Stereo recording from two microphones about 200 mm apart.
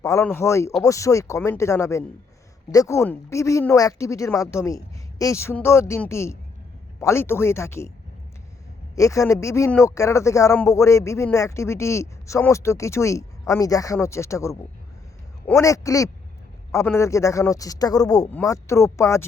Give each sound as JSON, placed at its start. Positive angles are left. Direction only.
{"t": 0.0, "sound": "speech", "side_deg": 15}
{"t": 9.0, "sound": "speech", "side_deg": 15}